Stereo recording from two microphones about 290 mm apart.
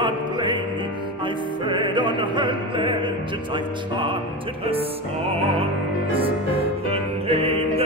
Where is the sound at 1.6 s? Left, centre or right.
Centre.